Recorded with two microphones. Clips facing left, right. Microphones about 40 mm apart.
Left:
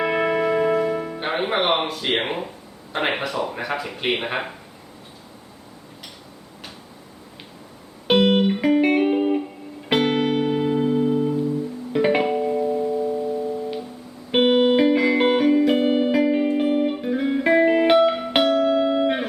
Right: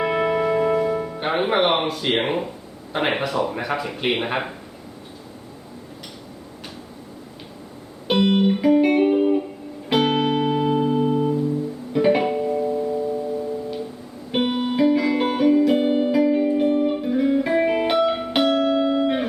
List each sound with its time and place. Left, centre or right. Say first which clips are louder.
0.0 s music: even; centre
1.2 s speech: right 3 dB; centre
8.1 s music: left 1 dB; centre
9.9 s music: even; centre
11.0 s music: even; centre
11.9 s music: right 1 dB; centre
14.3 s music: left 6 dB; left
14.9 s music: left 2 dB; centre
15.9 s music: even; left
16.1 s music: right 1 dB; left
16.6 s music: right 1 dB; left
17.0 s music: right 2 dB; centre
18.9 s music: even; centre